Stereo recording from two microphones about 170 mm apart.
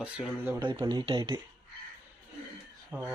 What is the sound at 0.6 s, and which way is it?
Speech, 25° right (ahead or behind).